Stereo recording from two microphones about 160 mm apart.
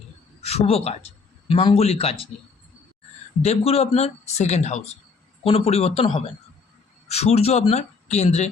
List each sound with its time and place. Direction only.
0.4 s speech: 40° left (ahead or behind)
3.4 s speech: 40° left (ahead or behind)